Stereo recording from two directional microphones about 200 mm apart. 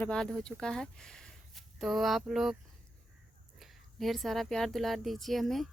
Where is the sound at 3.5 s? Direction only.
Centre (ahead or behind).